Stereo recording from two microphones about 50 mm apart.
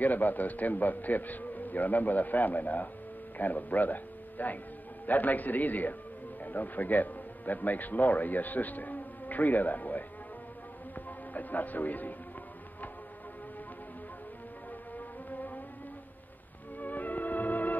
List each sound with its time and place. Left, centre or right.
0.0 s a man's voice: left
11.1 s music: left
15.0 s music: left
16.7 s music: left